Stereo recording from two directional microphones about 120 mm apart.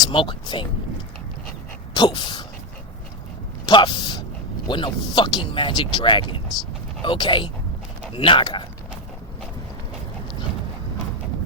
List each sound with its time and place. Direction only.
0.1 s speech: 40° left (ahead or behind)
1.9 s sneeze: 40° left (ahead or behind)
3.7 s a sound: 40° left (ahead or behind)
4.7 s speech: 40° left (ahead or behind)